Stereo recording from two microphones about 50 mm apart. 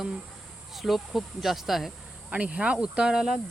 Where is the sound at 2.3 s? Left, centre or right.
Right.